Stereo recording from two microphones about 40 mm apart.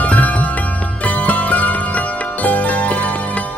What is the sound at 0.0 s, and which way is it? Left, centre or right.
Music, left.